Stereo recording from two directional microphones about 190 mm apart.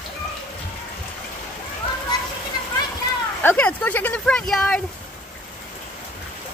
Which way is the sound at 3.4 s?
10° left (ahead or behind).